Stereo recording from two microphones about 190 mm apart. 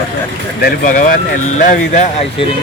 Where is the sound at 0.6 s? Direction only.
50° left (ahead or behind).